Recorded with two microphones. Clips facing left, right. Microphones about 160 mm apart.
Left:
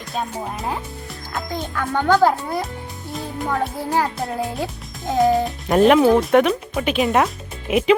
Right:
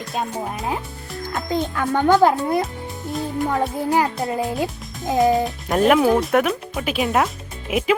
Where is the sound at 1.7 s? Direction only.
20° right (ahead or behind).